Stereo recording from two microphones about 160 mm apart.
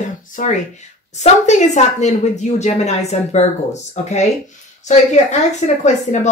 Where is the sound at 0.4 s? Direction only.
50° left (ahead or behind).